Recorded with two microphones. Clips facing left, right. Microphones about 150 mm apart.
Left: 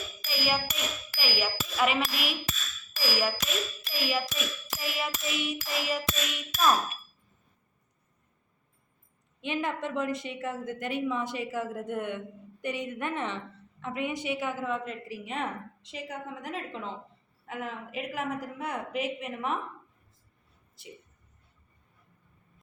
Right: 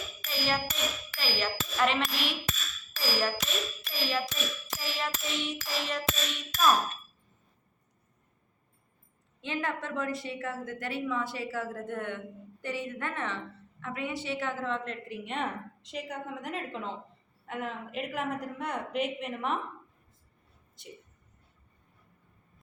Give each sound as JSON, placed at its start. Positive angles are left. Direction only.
{"t": 0.3, "sound": "music", "side_deg": 10}
{"t": 1.1, "sound": "a woman's voice", "side_deg": 10}
{"t": 9.4, "sound": "a woman's voice", "side_deg": 15}
{"t": 20.8, "sound": "a woman's voice", "side_deg": 5}